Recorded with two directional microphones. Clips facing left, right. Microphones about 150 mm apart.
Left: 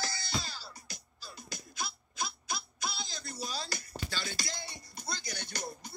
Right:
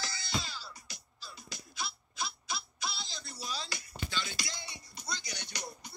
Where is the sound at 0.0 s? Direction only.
40° left (ahead or behind).